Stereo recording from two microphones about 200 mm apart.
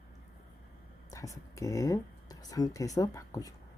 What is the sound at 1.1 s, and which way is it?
Speech, 15° left (ahead or behind).